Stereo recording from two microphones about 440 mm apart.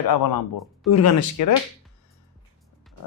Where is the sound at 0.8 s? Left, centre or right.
Left.